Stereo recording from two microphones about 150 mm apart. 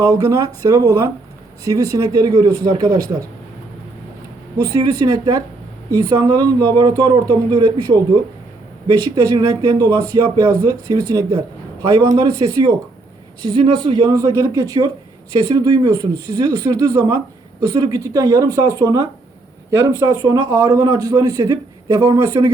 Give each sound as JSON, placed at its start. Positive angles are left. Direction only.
{"t": 0.0, "sound": "speech", "side_deg": -20}
{"t": 4.6, "sound": "speech", "side_deg": -25}
{"t": 9.1, "sound": "speech", "side_deg": -25}
{"t": 20.2, "sound": "speech", "side_deg": -25}